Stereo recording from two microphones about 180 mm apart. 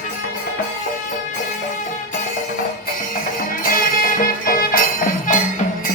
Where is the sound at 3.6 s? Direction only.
50° left (ahead or behind).